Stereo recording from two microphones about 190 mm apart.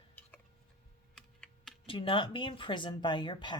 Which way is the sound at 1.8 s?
30° left (ahead or behind).